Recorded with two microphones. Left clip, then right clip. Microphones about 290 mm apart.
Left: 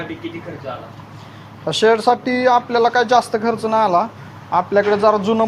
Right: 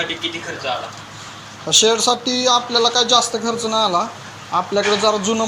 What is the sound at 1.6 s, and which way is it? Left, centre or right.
A man's voice, left.